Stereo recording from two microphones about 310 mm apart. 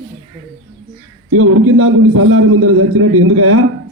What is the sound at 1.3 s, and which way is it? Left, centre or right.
A man's voice, right.